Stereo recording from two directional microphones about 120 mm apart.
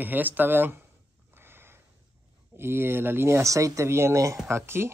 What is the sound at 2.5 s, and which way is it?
Speech, 20° right (ahead or behind).